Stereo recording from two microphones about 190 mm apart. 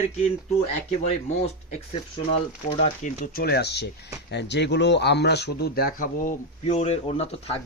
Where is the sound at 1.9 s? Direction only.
30° left (ahead or behind).